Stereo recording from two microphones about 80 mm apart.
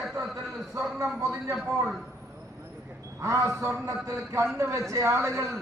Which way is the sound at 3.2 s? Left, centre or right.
Right.